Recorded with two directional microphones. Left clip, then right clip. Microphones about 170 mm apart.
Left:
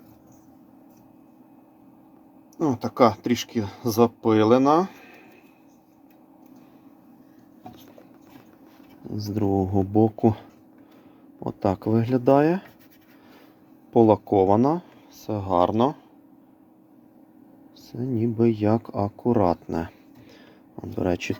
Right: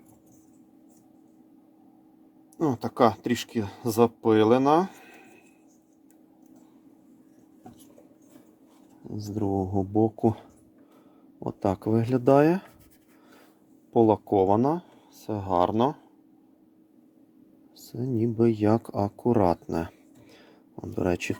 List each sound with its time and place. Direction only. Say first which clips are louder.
2.6 s speech: left 3 dB; 15° right (ahead or behind)
9.0 s speech: left 4 dB; centre (ahead or behind); by 12.6 s 15° right (ahead or behind)
13.9 s speech: left 3 dB; centre (ahead or behind)
17.7 s speech: left 1 dB; 20° right (ahead or behind)